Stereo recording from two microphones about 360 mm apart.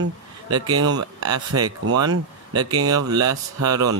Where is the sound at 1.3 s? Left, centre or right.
Right.